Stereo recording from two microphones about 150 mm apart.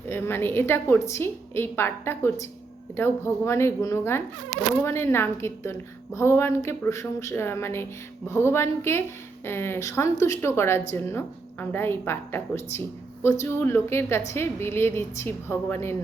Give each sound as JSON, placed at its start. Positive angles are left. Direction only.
{"t": 0.1, "sound": "a woman's voice", "side_deg": 15}